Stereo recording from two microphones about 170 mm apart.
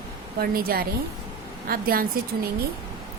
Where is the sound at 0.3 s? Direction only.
60° right (ahead or behind).